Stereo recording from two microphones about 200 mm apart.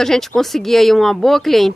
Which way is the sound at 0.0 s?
Centre (ahead or behind).